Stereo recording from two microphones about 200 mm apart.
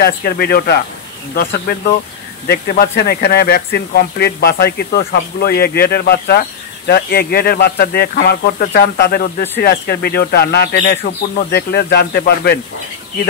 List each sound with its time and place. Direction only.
0.0 s speech: 50° left (ahead or behind)